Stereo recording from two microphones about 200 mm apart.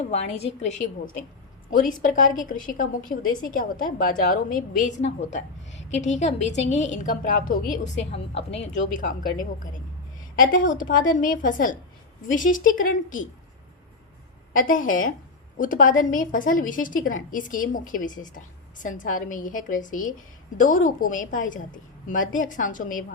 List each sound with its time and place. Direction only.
0.0 s a woman's voice: 30° left (ahead or behind)
8.1 s a woman's voice: 30° left (ahead or behind)
14.5 s a woman's voice: 45° left (ahead or behind)